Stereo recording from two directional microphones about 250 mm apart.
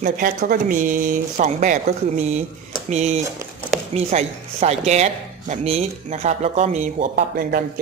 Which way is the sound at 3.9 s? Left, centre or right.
Right.